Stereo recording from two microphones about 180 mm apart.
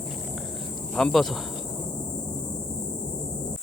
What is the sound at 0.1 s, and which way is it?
Walk, centre (ahead or behind).